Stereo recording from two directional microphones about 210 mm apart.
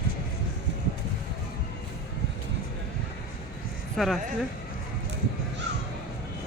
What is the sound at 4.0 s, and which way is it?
Speech, centre (ahead or behind).